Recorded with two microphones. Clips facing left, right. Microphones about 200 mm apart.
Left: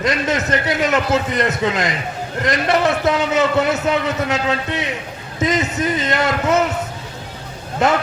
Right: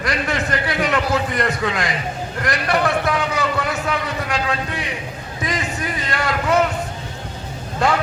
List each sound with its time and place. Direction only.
0.0 s a man's voice: 20° left (ahead or behind)